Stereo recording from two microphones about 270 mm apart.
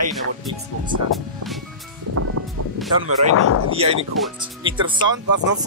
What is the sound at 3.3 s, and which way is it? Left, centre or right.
Speech, left.